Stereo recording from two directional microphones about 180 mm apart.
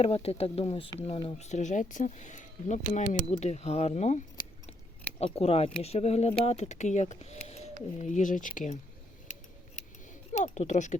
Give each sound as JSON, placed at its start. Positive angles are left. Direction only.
{"t": 0.0, "sound": "speech", "side_deg": 35}
{"t": 5.2, "sound": "speech", "side_deg": 35}
{"t": 9.2, "sound": "scissors", "side_deg": 40}
{"t": 10.3, "sound": "a sound", "side_deg": 40}